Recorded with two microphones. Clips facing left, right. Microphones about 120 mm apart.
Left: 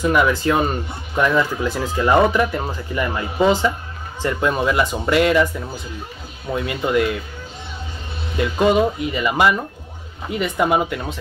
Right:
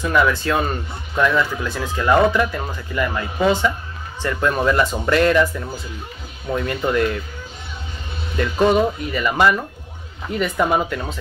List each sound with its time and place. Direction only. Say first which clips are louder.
0.0 s speech: left 1 dB; 15° left (ahead or behind)
6.5 s speech: even; 10° left (ahead or behind)
8.4 s speech: even; 15° left (ahead or behind)